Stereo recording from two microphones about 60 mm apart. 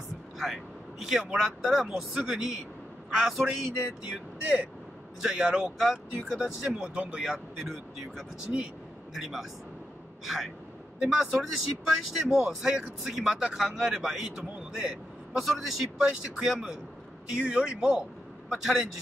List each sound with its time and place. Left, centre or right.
0.4 s a sound: centre
1.3 s speech: centre
7.2 s speech: centre